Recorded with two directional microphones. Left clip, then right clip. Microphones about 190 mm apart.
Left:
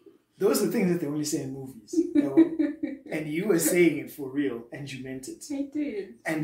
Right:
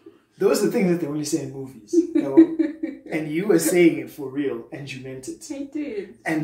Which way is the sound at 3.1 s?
Centre (ahead or behind).